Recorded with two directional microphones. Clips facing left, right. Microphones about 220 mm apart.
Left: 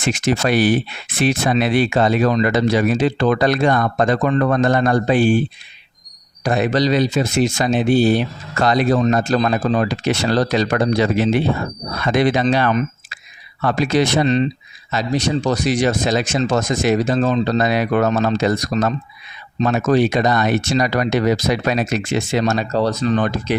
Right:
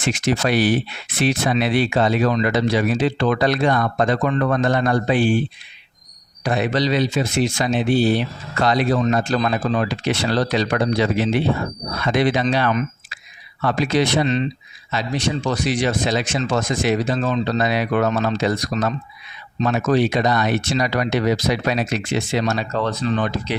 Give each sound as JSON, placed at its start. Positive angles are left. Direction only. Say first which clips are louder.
{"t": 0.0, "sound": "speech", "louder": "left 2 dB", "side_deg": 45}
{"t": 6.4, "sound": "speech", "louder": "left 3 dB", "side_deg": 45}